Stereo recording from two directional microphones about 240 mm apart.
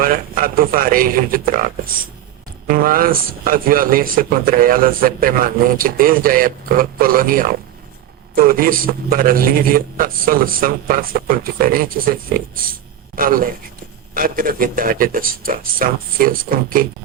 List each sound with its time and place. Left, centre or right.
0.0 s speech: right